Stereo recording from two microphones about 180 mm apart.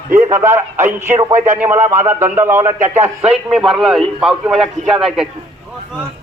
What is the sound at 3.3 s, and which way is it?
A man's voice, centre (ahead or behind).